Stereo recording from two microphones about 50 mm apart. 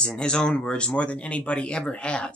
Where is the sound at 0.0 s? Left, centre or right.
Centre.